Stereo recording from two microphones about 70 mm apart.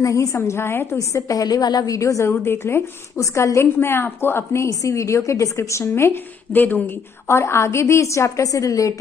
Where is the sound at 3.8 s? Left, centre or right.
Left.